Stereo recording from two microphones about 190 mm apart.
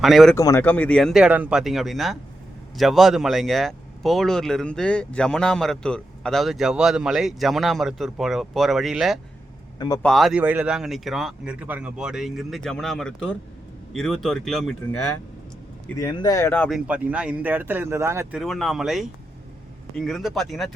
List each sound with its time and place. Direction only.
0.0 s speech: centre (ahead or behind)
0.3 s speech: 15° left (ahead or behind); by 9.1 s centre (ahead or behind)
9.7 s speech: 20° left (ahead or behind)
10.0 s speech: centre (ahead or behind)
16.0 s speech: 15° left (ahead or behind)
16.7 s speech: 5° right (ahead or behind)
18.3 s speech: centre (ahead or behind)